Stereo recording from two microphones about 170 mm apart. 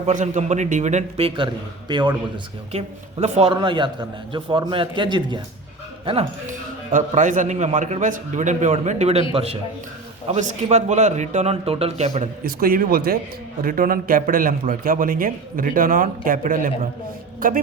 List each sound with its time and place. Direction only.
0.1 s a man's voice: 45° right (ahead or behind)
1.9 s a man's voice: 25° right (ahead or behind)
2.7 s a man's voice: 40° right (ahead or behind)
6.5 s a man's voice: 45° right (ahead or behind)
12.5 s a man's voice: 60° right (ahead or behind)